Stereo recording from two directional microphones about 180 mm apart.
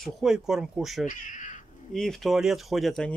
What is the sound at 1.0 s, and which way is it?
Speech, 45° left (ahead or behind).